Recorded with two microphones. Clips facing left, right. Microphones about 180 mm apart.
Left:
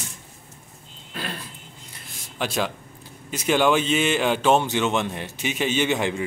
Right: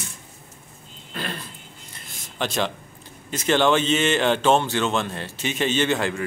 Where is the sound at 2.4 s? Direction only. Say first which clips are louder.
Right 1 dB; 5° left (ahead or behind).